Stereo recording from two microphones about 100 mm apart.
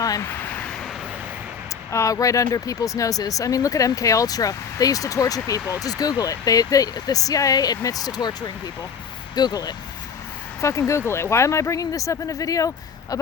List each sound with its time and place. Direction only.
0.0 s a sound: 35° left (ahead or behind)
1.9 s speech: 30° left (ahead or behind)
10.6 s speech: 30° left (ahead or behind)